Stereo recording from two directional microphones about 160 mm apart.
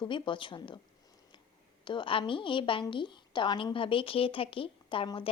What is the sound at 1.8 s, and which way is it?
A woman's voice, 30° left (ahead or behind).